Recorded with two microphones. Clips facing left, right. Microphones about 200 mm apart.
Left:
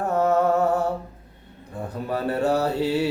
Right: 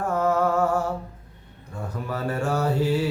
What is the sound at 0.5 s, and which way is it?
Music, 35° left (ahead or behind).